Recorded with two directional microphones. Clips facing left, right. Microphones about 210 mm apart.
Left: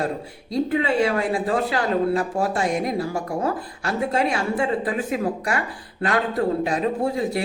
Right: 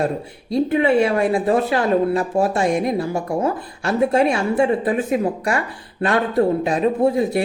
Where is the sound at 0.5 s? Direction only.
25° right (ahead or behind).